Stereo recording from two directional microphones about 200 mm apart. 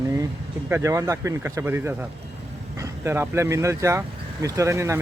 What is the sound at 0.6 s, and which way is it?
Speech, 10° right (ahead or behind).